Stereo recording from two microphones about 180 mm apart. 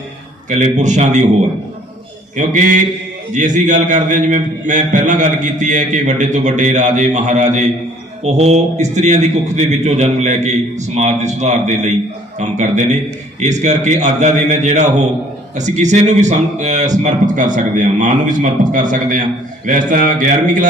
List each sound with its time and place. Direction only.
0.5 s a man's voice: 40° right (ahead or behind)
2.3 s a man's voice: 45° right (ahead or behind)